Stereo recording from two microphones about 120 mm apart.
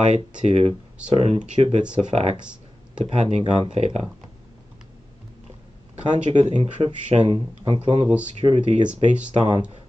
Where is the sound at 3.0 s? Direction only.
65° right (ahead or behind).